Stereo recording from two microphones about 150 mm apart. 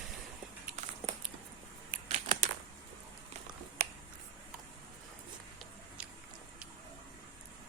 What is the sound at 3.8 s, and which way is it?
Finger snapping, 45° right (ahead or behind).